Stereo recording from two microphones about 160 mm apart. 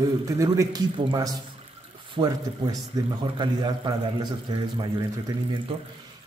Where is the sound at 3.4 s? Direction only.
30° right (ahead or behind).